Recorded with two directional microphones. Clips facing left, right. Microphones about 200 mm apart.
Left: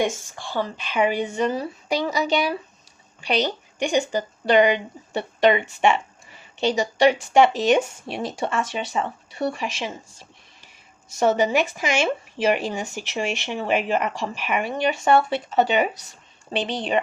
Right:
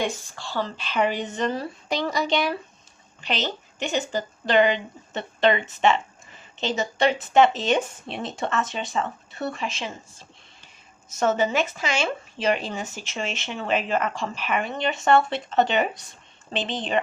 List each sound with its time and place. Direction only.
0.0 s speech: 15° left (ahead or behind)